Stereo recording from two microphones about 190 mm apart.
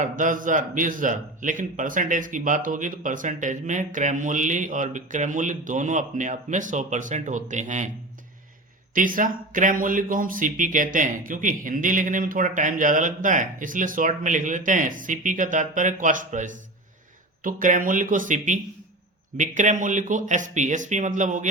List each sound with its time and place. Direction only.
0.0 s a man's voice: 45° right (ahead or behind)
9.0 s a man's voice: 45° right (ahead or behind)